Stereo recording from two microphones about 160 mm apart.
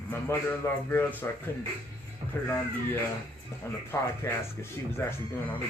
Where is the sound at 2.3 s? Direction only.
15° left (ahead or behind).